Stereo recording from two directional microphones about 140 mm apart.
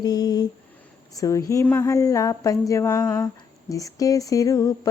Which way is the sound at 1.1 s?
25° left (ahead or behind).